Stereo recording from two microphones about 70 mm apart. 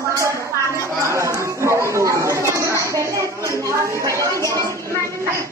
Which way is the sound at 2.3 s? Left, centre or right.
Right.